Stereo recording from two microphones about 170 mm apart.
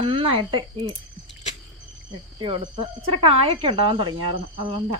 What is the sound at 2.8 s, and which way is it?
Speech, 35° right (ahead or behind).